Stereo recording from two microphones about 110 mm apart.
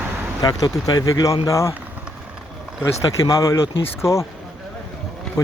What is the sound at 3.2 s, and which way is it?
Speech, 30° left (ahead or behind).